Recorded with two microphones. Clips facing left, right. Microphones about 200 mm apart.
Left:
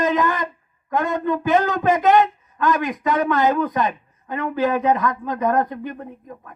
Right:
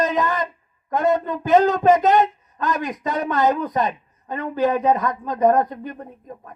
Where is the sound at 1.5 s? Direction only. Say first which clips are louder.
Right 5 dB; 20° right (ahead or behind).